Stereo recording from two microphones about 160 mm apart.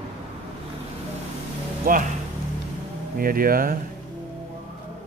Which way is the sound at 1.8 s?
60° right (ahead or behind).